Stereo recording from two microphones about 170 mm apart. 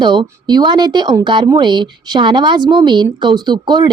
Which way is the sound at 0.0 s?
25° right (ahead or behind).